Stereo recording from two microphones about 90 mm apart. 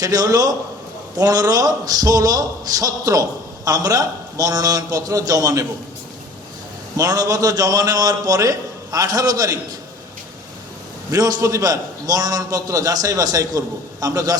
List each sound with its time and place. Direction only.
0.0 s a man's voice: 45° right (ahead or behind)
6.9 s a man's voice: 45° right (ahead or behind)
11.1 s a man's voice: 40° right (ahead or behind)